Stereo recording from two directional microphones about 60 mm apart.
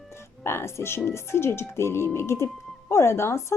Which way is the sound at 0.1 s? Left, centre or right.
Left.